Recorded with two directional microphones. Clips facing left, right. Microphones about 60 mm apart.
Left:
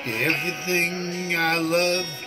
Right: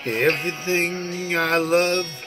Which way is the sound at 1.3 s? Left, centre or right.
Centre.